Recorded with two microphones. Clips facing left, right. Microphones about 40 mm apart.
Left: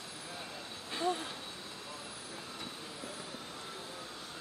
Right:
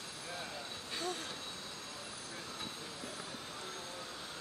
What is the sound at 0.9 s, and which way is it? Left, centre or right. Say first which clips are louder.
Vehicle: left 7 dB; centre.